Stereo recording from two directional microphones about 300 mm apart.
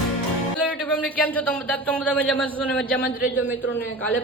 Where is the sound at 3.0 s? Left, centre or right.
Left.